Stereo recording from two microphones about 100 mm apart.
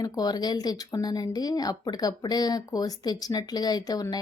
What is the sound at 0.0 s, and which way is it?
A woman's voice, 40° left (ahead or behind).